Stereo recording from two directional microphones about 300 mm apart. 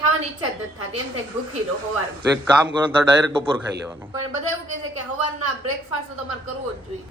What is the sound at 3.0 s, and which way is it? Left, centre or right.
Speech, centre.